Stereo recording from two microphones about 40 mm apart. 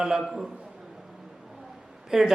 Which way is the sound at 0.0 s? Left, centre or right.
Centre.